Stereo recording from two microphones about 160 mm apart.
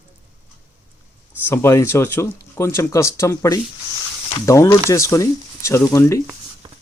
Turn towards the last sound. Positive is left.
turn(degrees=20)  # may be behind; listen again after turning